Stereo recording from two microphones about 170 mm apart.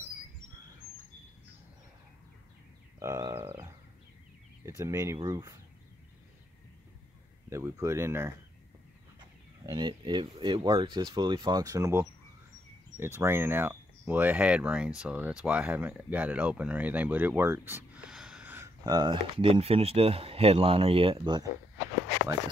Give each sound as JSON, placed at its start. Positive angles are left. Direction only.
{"t": 3.0, "sound": "frog", "side_deg": -20}
{"t": 4.6, "sound": "speech", "side_deg": -15}
{"t": 7.4, "sound": "speech", "side_deg": -15}
{"t": 9.6, "sound": "speech", "side_deg": -25}
{"t": 18.9, "sound": "speech", "side_deg": -25}